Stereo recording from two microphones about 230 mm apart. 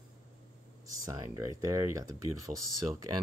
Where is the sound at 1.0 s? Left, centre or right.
Centre.